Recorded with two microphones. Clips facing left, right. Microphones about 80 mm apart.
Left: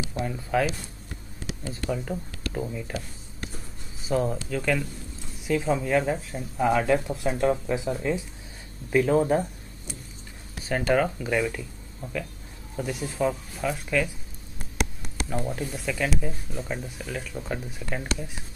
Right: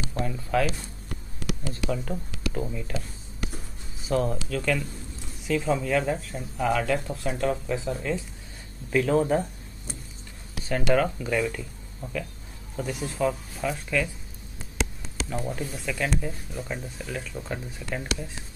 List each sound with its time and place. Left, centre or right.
0.2 s speech: centre
4.0 s speech: centre
6.6 s speech: centre
11.0 s speech: centre
15.2 s speech: centre
17.8 s speech: centre